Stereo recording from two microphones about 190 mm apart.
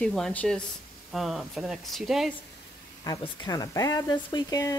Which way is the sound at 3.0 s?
20° left (ahead or behind).